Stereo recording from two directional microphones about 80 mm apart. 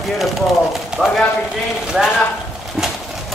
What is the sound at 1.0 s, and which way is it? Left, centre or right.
Speech, centre.